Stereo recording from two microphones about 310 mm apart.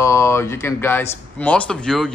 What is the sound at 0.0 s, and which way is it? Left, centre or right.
Speech, centre.